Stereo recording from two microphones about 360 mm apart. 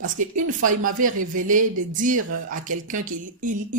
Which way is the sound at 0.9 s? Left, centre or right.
Right.